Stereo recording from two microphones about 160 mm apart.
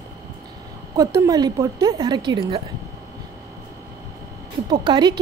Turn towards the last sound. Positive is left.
turn(degrees=-25)  # may be behind; listen again after turning